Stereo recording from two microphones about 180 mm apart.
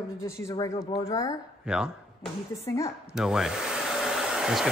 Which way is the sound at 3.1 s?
5° right (ahead or behind).